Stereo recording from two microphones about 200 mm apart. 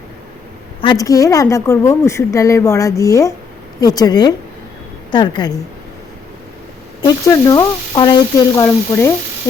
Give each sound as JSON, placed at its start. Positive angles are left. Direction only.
{"t": 0.8, "sound": "a woman's voice", "side_deg": 20}
{"t": 7.3, "sound": "a woman's voice", "side_deg": 20}